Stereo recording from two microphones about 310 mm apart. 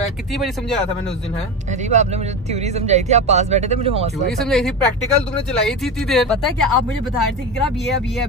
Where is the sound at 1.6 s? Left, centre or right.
Right.